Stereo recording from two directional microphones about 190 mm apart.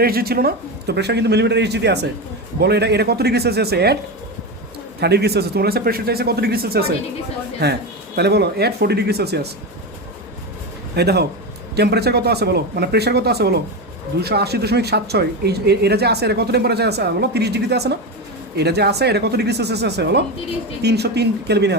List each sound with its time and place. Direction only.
0.0 s speech: 55° right (ahead or behind)
4.9 s speech: 60° right (ahead or behind)
10.9 s speech: 60° right (ahead or behind)